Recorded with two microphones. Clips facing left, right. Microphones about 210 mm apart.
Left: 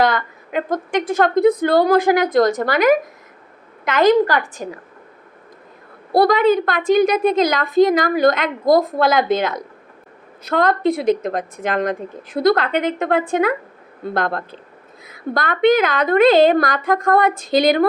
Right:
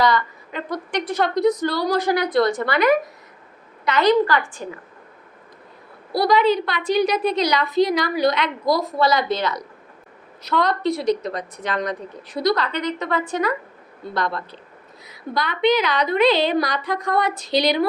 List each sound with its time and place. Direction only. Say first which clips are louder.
0.0 s a woman's voice: left 2 dB; 50° left (ahead or behind)
6.1 s a woman's voice: left 4 dB; 50° left (ahead or behind)